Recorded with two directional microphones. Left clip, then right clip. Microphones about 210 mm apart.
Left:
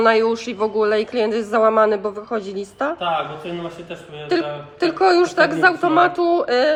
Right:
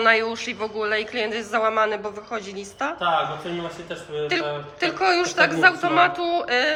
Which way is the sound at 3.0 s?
10° right (ahead or behind).